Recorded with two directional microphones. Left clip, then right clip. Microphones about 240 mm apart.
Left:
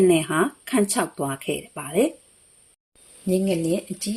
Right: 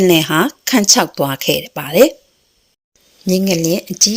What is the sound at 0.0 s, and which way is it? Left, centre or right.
Speech, right.